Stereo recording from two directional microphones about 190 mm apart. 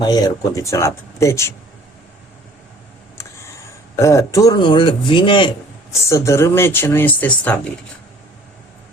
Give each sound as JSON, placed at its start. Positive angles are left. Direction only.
{"t": 0.0, "sound": "speech", "side_deg": 20}
{"t": 3.2, "sound": "speech", "side_deg": 15}
{"t": 5.9, "sound": "speech", "side_deg": 15}